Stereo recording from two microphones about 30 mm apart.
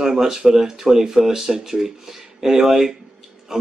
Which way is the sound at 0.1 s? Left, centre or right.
Centre.